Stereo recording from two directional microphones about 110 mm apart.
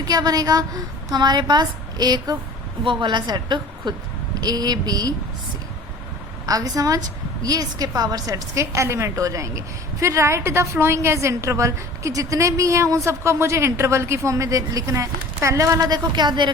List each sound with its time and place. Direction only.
0.0 s a woman's voice: 35° right (ahead or behind)
6.4 s a woman's voice: 35° right (ahead or behind)